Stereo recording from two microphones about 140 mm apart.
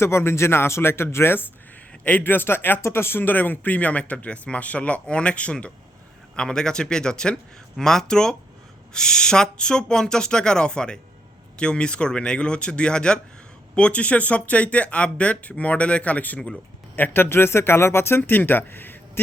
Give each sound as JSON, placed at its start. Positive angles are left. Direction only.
{"t": 0.0, "sound": "speech", "side_deg": 20}